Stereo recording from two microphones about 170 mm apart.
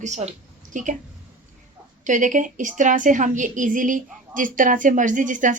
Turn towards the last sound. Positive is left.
turn(degrees=-50)  # may be behind; listen again after turning